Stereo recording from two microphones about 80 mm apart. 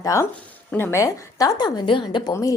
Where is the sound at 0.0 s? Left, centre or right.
Left.